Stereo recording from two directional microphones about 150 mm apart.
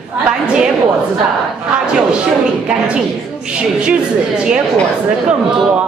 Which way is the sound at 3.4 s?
5° right (ahead or behind).